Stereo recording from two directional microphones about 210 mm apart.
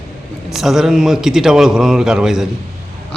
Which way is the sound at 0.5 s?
Centre (ahead or behind).